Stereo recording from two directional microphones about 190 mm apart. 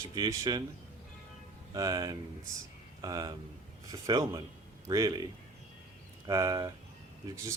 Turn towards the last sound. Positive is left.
turn(degrees=-15)  # may be behind; listen again after turning